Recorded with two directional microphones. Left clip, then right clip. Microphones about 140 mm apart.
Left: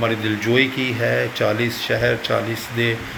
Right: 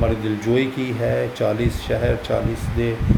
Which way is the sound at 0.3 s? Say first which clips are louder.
Left 2 dB; 20° right (ahead or behind).